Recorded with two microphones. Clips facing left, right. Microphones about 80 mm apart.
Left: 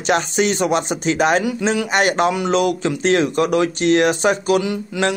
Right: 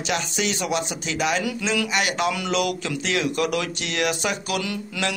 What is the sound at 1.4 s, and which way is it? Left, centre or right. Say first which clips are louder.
Speech: left 6 dB; left.